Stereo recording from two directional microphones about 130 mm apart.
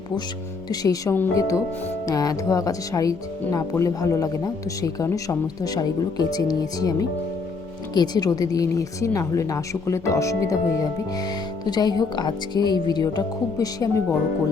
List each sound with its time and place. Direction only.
0.7 s speech: 30° left (ahead or behind)
7.9 s speech: 30° left (ahead or behind)